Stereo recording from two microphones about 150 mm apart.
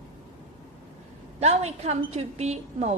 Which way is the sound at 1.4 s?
45° right (ahead or behind).